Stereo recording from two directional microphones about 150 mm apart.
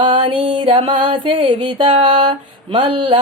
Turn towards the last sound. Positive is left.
turn(degrees=-35)  # may be behind; listen again after turning